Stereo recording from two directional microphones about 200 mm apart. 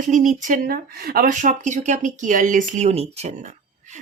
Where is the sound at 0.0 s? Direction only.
40° right (ahead or behind).